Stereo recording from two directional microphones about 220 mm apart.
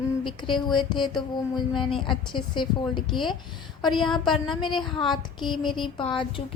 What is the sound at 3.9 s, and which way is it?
Speech, centre (ahead or behind).